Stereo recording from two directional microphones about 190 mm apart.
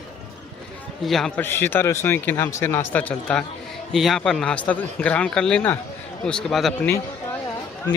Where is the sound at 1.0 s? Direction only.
Centre (ahead or behind).